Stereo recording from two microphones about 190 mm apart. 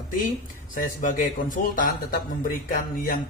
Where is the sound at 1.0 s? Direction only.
45° left (ahead or behind).